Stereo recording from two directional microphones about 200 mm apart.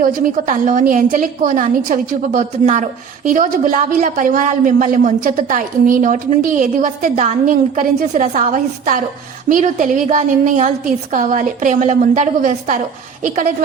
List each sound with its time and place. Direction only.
0.0 s a woman's voice: 40° right (ahead or behind)